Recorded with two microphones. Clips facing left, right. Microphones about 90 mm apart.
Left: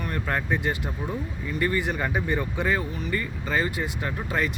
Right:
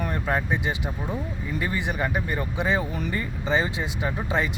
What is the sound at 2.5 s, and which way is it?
Speech, 20° right (ahead or behind).